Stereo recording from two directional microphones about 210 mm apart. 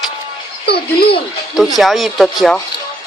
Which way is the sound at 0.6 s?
50° left (ahead or behind).